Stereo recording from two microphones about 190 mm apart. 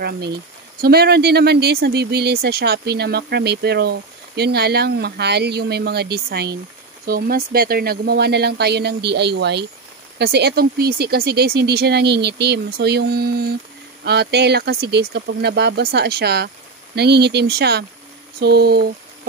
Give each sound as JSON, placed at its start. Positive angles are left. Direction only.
{"t": 0.7, "sound": "speech", "side_deg": -55}